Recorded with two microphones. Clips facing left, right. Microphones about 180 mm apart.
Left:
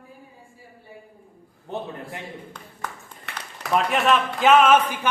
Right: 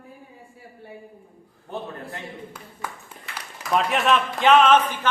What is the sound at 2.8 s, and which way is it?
A man's voice, 10° right (ahead or behind).